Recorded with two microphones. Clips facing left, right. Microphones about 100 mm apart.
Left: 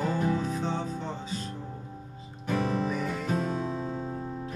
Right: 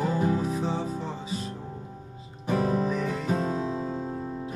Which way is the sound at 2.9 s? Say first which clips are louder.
Right 3 dB; 5° left (ahead or behind).